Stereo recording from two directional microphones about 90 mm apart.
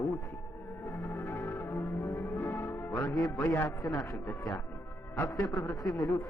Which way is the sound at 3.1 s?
Centre (ahead or behind).